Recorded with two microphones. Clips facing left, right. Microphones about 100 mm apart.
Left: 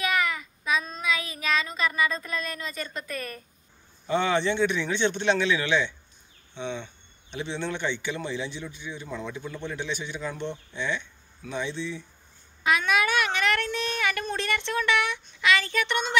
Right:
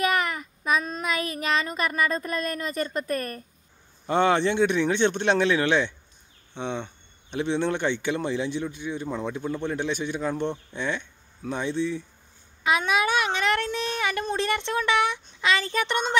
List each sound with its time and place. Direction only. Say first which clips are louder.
0.0 s child singing: right 2 dB; 50° right (ahead or behind)
4.1 s speech: right 3 dB; 55° right (ahead or behind)
12.6 s speech: right 1 dB; 25° right (ahead or behind)